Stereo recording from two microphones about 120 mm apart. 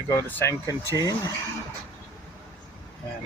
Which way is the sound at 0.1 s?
20° left (ahead or behind).